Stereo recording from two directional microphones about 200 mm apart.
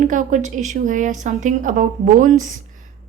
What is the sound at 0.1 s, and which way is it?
A woman's voice, 40° right (ahead or behind).